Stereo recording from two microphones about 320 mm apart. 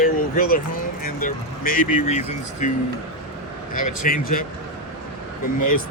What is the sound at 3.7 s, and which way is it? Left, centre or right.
Speech, left.